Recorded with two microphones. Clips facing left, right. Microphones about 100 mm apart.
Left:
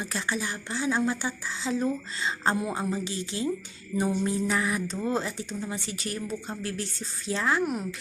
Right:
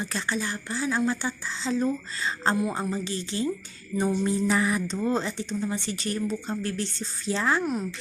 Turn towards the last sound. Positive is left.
turn(degrees=15)  # may be behind; listen again after turning